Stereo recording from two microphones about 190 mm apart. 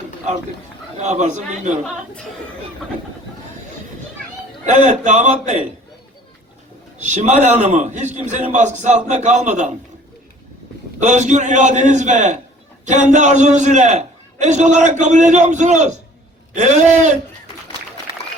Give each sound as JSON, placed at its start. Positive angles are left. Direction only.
{"t": 0.9, "sound": "a man's voice", "side_deg": -40}
{"t": 4.6, "sound": "a man's voice", "side_deg": -40}
{"t": 7.0, "sound": "a man's voice", "side_deg": -40}
{"t": 11.0, "sound": "a man's voice", "side_deg": -40}